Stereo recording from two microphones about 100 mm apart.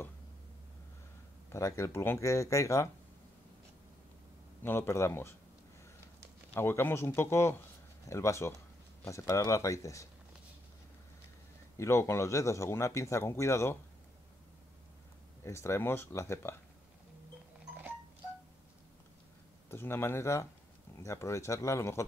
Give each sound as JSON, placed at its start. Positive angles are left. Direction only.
{"t": 1.5, "sound": "speech", "side_deg": 30}
{"t": 4.6, "sound": "speech", "side_deg": 25}
{"t": 6.5, "sound": "speech", "side_deg": 25}
{"t": 11.7, "sound": "speech", "side_deg": 30}
{"t": 15.4, "sound": "speech", "side_deg": 30}
{"t": 19.7, "sound": "speech", "side_deg": 25}